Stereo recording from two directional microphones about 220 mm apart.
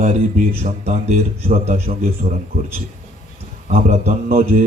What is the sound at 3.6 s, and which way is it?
Speech, 40° right (ahead or behind).